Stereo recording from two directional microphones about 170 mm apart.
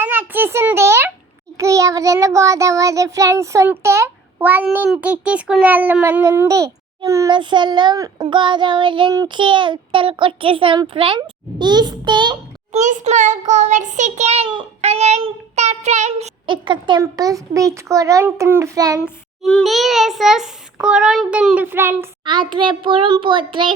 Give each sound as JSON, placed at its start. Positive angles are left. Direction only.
{"t": 0.0, "sound": "a sound", "side_deg": -10}
{"t": 1.5, "sound": "child singing", "side_deg": -20}
{"t": 11.6, "sound": "a child's voice", "side_deg": -25}
{"t": 12.8, "sound": "child singing", "side_deg": -45}
{"t": 19.4, "sound": "a child's voice", "side_deg": 0}
{"t": 22.2, "sound": "child singing", "side_deg": -25}